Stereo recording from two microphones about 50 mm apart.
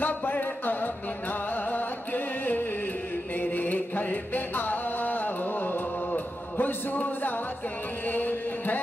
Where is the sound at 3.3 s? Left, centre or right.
Left.